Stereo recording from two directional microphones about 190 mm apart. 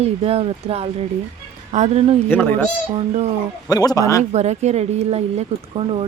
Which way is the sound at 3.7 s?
20° left (ahead or behind).